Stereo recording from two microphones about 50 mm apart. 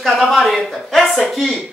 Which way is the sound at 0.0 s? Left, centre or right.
Centre.